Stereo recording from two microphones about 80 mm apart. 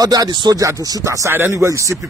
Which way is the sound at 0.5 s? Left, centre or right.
Right.